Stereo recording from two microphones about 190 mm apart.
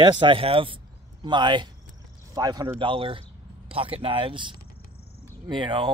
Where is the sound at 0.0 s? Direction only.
25° right (ahead or behind).